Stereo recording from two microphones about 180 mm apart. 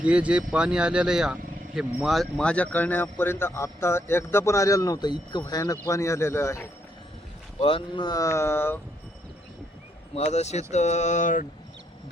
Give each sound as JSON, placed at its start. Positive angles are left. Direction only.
{"t": 0.0, "sound": "speech", "side_deg": -5}
{"t": 7.6, "sound": "speech", "side_deg": 30}
{"t": 10.2, "sound": "speech", "side_deg": 40}